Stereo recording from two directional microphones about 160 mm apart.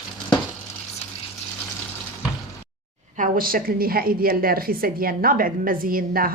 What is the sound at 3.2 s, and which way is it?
A woman's voice, 65° right (ahead or behind).